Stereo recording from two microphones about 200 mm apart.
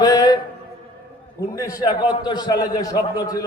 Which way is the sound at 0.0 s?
20° left (ahead or behind).